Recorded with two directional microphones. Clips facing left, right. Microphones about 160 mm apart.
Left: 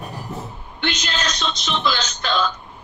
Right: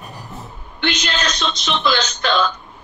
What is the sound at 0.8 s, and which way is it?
Speech, 70° right (ahead or behind).